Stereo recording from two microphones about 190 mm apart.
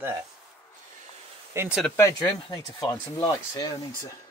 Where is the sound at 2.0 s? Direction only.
15° left (ahead or behind).